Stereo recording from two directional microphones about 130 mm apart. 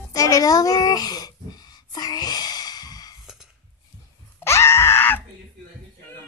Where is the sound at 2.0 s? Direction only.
30° left (ahead or behind).